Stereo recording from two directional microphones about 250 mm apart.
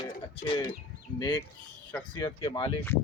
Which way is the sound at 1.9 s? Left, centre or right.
Centre.